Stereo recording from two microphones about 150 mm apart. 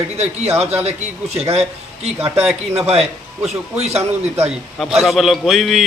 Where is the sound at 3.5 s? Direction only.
45° right (ahead or behind).